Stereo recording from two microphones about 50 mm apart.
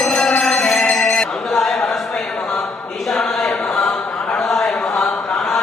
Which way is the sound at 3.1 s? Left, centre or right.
Centre.